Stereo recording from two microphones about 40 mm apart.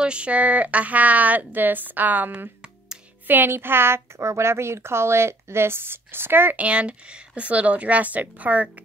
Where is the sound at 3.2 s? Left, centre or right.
Right.